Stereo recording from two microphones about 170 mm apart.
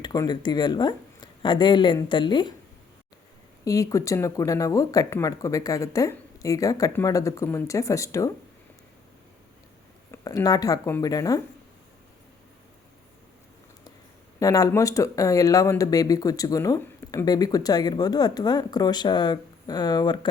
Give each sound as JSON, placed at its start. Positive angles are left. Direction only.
{"t": 0.0, "sound": "speech", "side_deg": 25}
{"t": 3.6, "sound": "speech", "side_deg": 20}
{"t": 10.1, "sound": "speech", "side_deg": 20}
{"t": 14.3, "sound": "speech", "side_deg": 20}